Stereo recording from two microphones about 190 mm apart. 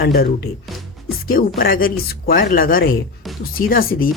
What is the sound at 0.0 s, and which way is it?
Speech, 55° left (ahead or behind).